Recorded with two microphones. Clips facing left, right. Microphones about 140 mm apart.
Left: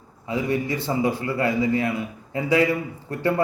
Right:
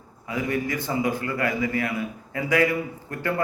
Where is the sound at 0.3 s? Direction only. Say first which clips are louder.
Left 2 dB; 25° left (ahead or behind).